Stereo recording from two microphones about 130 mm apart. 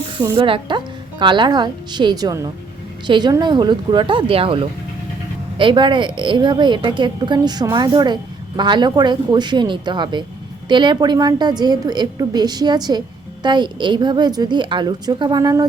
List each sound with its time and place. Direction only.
0.2 s a woman's voice: 40° right (ahead or behind)